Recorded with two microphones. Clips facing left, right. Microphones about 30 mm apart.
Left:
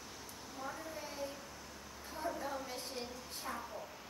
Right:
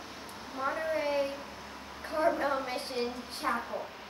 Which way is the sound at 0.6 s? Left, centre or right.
Right.